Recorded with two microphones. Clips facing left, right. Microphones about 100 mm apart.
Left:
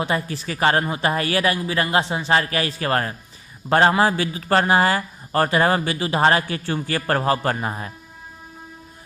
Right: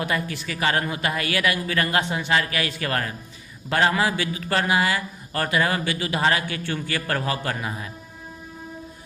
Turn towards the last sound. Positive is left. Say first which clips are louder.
# left 5 dB
turn(degrees=40)  # may be behind; listen again after turning